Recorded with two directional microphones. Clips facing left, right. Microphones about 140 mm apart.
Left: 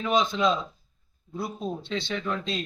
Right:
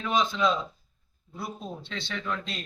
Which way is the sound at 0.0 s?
20° left (ahead or behind).